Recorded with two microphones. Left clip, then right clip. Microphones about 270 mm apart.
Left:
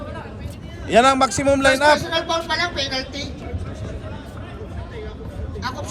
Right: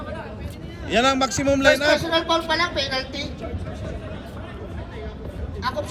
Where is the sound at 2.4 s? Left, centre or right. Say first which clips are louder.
Even; right.